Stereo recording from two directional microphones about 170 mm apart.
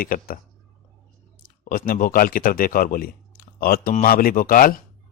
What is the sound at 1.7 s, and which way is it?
Speech, 55° left (ahead or behind).